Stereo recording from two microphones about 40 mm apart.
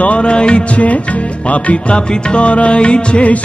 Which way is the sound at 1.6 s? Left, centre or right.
Left.